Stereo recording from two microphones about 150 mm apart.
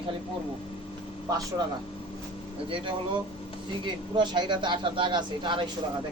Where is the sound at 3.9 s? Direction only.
30° right (ahead or behind).